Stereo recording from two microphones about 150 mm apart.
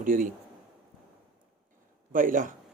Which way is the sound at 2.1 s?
60° right (ahead or behind).